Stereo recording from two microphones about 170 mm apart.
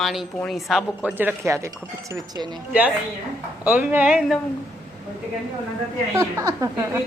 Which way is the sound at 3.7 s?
10° right (ahead or behind).